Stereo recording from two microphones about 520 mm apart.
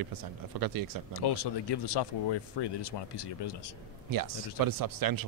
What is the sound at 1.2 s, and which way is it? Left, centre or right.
Speech, left.